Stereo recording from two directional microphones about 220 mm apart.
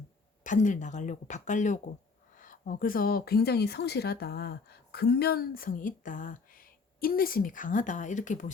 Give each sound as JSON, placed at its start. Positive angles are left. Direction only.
{"t": 0.4, "sound": "a woman's voice", "side_deg": 35}